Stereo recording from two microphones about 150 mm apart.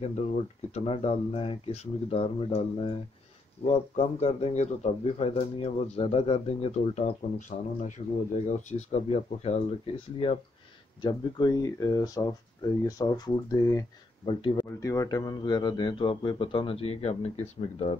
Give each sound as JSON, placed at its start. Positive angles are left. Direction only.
{"t": 0.7, "sound": "speech", "side_deg": 45}
{"t": 11.0, "sound": "speech", "side_deg": 30}
{"t": 14.2, "sound": "speech", "side_deg": 35}
{"t": 14.8, "sound": "speech", "side_deg": 20}